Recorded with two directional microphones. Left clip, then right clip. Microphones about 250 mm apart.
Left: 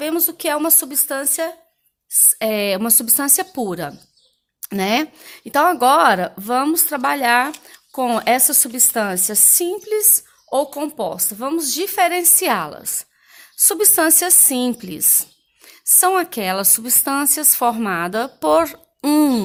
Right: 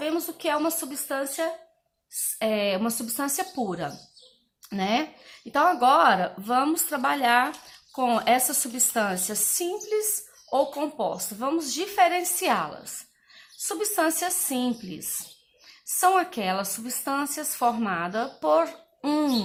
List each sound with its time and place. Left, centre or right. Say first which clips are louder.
0.0 s a woman's voice: left 6 dB; left